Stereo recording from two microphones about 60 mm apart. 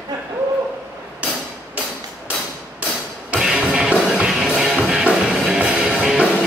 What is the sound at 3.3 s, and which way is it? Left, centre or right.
Music, centre.